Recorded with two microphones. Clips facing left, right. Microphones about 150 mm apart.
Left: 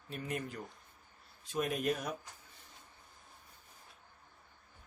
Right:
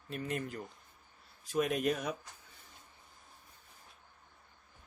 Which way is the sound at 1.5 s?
Centre (ahead or behind).